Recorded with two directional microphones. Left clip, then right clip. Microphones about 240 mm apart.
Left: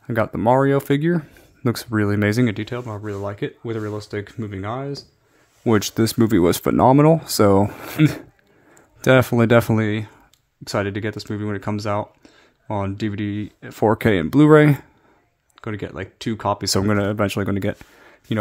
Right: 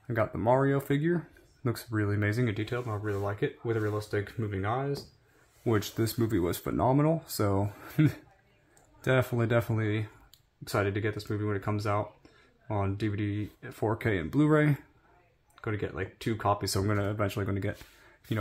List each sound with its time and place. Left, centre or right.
0.1 s speech: left